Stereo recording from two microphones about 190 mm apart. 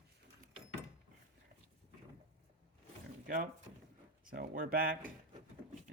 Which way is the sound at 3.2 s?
45° right (ahead or behind).